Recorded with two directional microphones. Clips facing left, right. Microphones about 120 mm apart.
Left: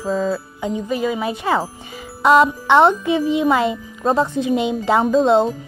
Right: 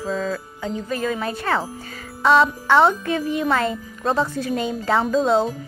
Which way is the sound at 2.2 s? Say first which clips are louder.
Left 3 dB; 5° left (ahead or behind).